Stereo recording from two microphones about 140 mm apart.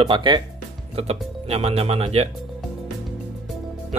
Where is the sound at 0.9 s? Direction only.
45° right (ahead or behind).